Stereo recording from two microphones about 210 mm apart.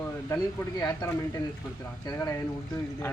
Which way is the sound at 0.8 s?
15° left (ahead or behind).